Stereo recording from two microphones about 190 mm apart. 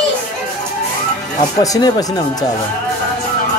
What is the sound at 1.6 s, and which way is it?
Speech, 20° left (ahead or behind).